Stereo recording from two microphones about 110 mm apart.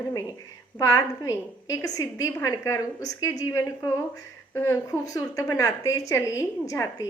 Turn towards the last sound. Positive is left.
turn(degrees=30)  # may be behind; listen again after turning